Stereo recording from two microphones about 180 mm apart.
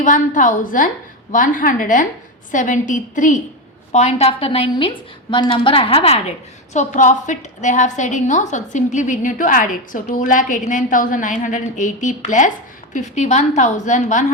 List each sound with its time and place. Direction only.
0.0 s a woman's voice: 45° left (ahead or behind)